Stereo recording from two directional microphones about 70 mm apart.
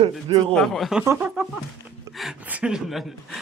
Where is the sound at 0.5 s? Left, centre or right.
Centre.